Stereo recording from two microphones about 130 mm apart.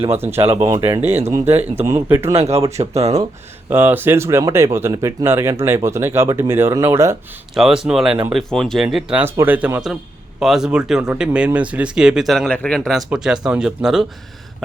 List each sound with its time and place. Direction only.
0.2 s speech: 20° right (ahead or behind)
0.4 s speech: 50° right (ahead or behind)
1.9 s speech: 20° right (ahead or behind)
2.7 s speech: 55° right (ahead or behind)
3.7 s speech: 15° right (ahead or behind)
7.5 s speech: 5° right (ahead or behind)
9.2 s speech: 15° right (ahead or behind)